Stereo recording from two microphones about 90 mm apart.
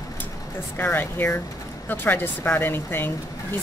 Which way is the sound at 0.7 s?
20° left (ahead or behind).